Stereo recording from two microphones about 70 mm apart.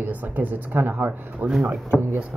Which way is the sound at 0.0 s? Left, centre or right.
Right.